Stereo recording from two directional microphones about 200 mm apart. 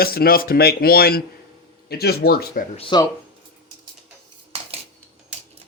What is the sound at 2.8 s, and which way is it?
Speech, 25° left (ahead or behind).